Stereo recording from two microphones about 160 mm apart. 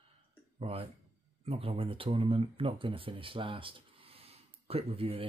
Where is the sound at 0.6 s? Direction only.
40° right (ahead or behind).